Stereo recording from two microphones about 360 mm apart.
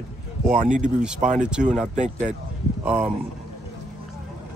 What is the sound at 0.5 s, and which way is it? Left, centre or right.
Speech, right.